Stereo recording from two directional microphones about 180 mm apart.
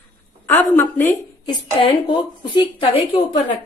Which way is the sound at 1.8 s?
30° left (ahead or behind).